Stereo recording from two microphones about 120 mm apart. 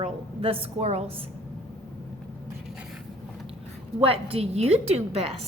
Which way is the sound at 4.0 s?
55° right (ahead or behind).